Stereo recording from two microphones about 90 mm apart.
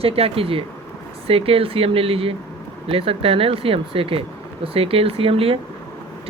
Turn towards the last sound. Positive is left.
turn(degrees=-90)